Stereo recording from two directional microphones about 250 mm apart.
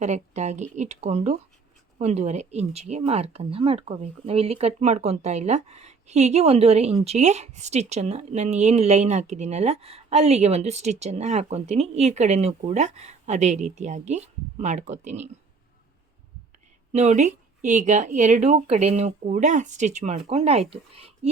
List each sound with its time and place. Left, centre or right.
0.0 s speech: right
16.9 s speech: right